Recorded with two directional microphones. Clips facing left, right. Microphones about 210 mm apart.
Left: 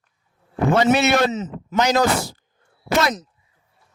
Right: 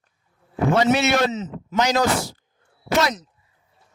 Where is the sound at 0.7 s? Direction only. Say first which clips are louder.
Left 2 dB; 55° left (ahead or behind).